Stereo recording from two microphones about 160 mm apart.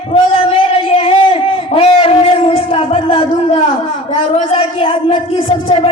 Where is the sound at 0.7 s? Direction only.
35° left (ahead or behind).